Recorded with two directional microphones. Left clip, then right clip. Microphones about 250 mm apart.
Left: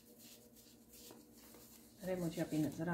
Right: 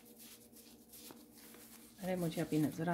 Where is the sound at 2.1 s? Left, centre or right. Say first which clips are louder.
Right 3 dB; right.